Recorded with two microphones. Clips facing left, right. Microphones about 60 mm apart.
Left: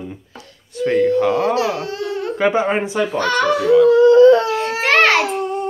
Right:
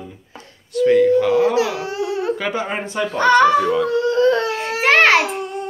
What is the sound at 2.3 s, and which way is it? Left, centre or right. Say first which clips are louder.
Speech: left 6 dB; left.